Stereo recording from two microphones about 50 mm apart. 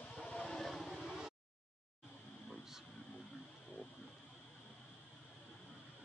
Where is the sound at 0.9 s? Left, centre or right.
Centre.